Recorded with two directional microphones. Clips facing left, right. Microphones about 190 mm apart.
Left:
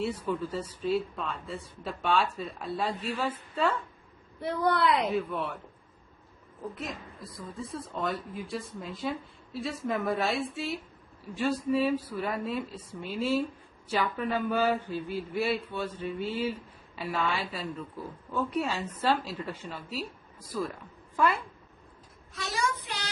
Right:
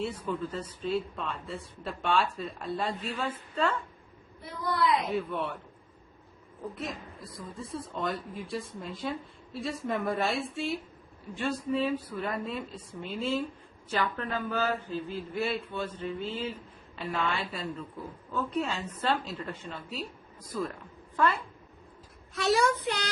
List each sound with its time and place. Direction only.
0.0 s speech: 10° left (ahead or behind)
4.4 s a man's voice: 65° left (ahead or behind)
5.0 s a woman's voice: centre (ahead or behind)
6.7 s a woman's voice: centre (ahead or behind)
22.4 s speech: 65° right (ahead or behind)